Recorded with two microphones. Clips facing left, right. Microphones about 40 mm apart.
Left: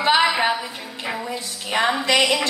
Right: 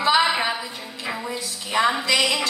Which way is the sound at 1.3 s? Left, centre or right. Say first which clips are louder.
Left 2 dB; left.